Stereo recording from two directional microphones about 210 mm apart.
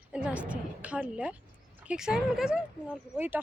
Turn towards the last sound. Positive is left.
turn(degrees=-5)  # may be behind; listen again after turning